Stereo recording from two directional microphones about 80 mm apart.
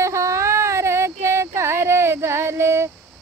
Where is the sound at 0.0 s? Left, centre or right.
Right.